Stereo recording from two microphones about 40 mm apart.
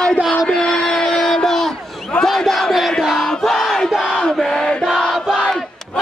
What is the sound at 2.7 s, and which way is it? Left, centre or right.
Battle cry, centre.